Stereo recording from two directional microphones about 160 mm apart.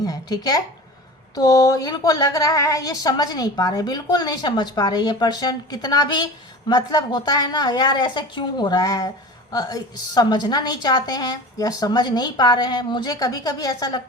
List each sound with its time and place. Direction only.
0.0 s a woman's voice: 25° left (ahead or behind)